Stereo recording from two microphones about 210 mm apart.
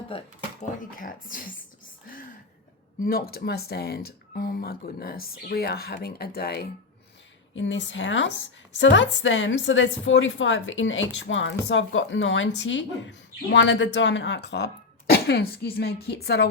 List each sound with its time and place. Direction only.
0.1 s speech: 25° left (ahead or behind)
0.6 s speech: 40° left (ahead or behind)
3.0 s speech: 45° left (ahead or behind)
7.5 s a woman's voice: 60° left (ahead or behind)